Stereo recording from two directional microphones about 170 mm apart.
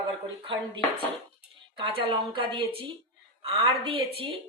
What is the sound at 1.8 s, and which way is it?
Speech, 30° right (ahead or behind).